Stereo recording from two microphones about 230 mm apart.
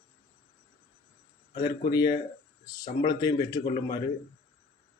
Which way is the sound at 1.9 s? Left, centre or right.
Centre.